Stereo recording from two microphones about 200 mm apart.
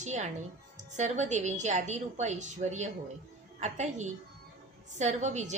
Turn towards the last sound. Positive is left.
turn(degrees=-35)  # may be behind; listen again after turning